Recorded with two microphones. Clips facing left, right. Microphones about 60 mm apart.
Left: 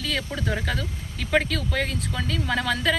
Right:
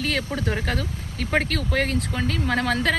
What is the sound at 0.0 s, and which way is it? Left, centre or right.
Speech, right.